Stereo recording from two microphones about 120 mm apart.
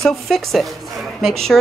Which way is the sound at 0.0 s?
Centre (ahead or behind).